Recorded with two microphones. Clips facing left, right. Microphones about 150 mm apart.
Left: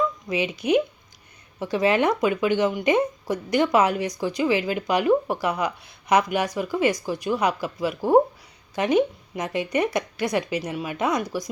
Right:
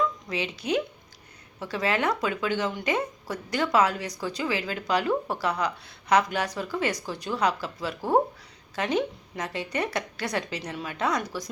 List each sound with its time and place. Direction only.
0.3 s speech: 15° left (ahead or behind)